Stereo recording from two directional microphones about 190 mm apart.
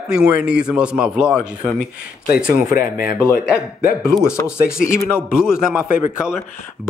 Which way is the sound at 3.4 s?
5° right (ahead or behind).